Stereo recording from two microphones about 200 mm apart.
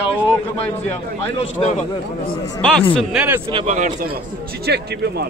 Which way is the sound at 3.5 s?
25° right (ahead or behind).